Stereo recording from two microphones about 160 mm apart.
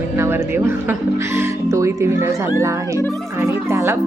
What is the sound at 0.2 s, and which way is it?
Speech, 15° right (ahead or behind).